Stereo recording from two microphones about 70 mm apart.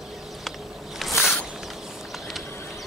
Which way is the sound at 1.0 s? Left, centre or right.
Centre.